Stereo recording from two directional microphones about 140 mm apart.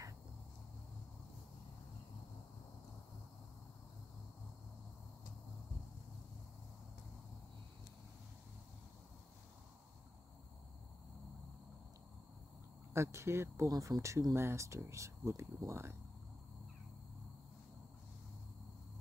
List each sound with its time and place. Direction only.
12.9 s speech: 20° right (ahead or behind)